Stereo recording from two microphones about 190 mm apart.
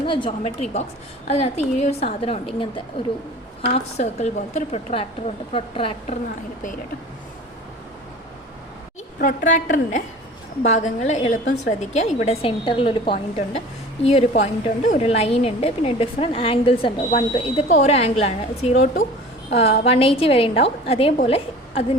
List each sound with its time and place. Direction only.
0.0 s a woman's voice: 25° left (ahead or behind)
3.9 s a woman's voice: 35° left (ahead or behind)
9.2 s a woman's voice: 45° left (ahead or behind)